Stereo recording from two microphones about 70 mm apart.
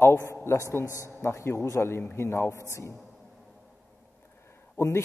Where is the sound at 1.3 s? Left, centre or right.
Left.